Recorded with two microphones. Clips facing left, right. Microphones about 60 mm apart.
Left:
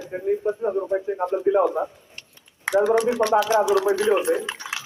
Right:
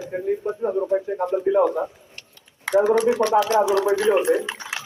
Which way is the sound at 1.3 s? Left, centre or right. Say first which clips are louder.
Right 1 dB; centre.